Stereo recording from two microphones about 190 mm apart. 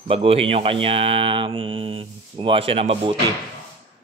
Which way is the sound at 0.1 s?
30° right (ahead or behind).